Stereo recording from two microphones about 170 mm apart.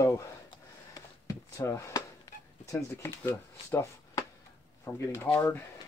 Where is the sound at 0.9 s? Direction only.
20° left (ahead or behind).